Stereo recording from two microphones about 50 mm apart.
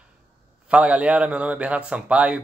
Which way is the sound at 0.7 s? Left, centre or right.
Right.